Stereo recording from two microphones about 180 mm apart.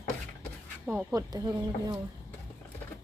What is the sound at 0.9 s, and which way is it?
Speech, 5° right (ahead or behind).